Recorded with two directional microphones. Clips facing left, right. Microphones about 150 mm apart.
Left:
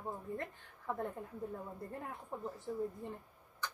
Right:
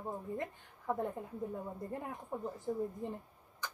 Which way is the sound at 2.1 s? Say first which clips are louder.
Right 3 dB; 20° right (ahead or behind).